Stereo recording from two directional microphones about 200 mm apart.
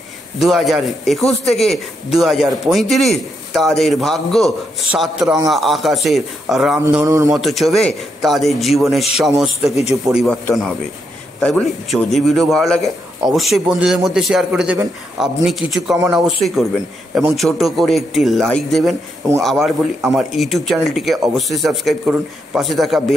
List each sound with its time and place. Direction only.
0.4 s speech: centre (ahead or behind)
7.1 s a man's voice: 15° right (ahead or behind)
7.3 s speech: centre (ahead or behind)
11.4 s speech: centre (ahead or behind)